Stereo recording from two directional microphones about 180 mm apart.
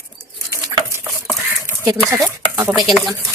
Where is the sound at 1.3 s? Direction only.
10° right (ahead or behind).